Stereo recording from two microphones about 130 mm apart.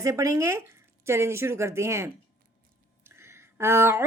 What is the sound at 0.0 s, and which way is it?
Speech, 25° right (ahead or behind).